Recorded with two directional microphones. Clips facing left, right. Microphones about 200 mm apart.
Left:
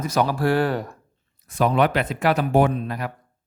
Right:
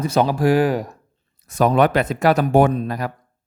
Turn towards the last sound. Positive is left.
turn(degrees=-40)  # may be behind; listen again after turning